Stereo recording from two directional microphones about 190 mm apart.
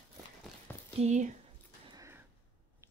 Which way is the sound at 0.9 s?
35° right (ahead or behind).